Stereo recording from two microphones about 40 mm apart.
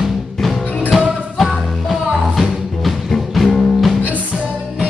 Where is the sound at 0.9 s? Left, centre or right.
Centre.